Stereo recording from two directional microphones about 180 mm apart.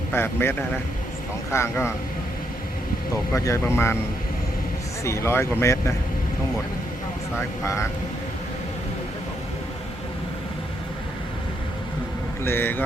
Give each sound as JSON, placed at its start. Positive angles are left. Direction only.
{"t": 0.1, "sound": "speech", "side_deg": 15}
{"t": 3.3, "sound": "speech", "side_deg": 15}
{"t": 5.0, "sound": "speech", "side_deg": 15}
{"t": 7.3, "sound": "speech", "side_deg": 15}
{"t": 12.5, "sound": "speech", "side_deg": 10}